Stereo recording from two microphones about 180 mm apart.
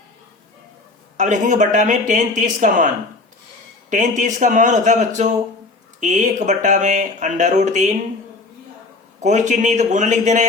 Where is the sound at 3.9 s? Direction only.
45° right (ahead or behind).